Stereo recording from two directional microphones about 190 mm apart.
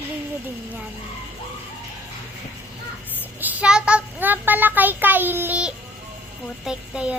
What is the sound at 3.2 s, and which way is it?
A child's voice, 10° right (ahead or behind).